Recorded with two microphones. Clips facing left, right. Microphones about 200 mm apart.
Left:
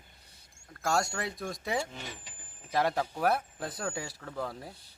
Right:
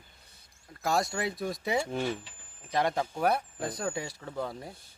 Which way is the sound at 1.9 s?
50° right (ahead or behind).